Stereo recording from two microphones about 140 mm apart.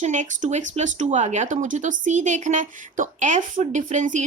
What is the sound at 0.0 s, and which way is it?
Speech, 60° right (ahead or behind).